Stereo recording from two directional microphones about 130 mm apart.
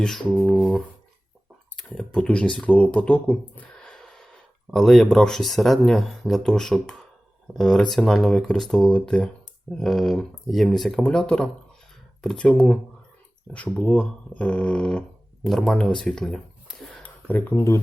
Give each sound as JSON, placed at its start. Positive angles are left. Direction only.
{"t": 0.3, "sound": "beatboxing", "side_deg": -10}
{"t": 1.7, "sound": "speech", "side_deg": 5}
{"t": 17.0, "sound": "a sound", "side_deg": 15}